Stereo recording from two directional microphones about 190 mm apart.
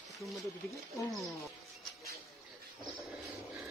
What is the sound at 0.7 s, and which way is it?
Speech, 15° left (ahead or behind).